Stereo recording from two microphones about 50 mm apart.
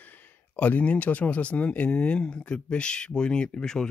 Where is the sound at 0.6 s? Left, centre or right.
Left.